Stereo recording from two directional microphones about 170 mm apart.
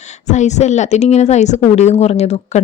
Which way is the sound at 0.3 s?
45° left (ahead or behind).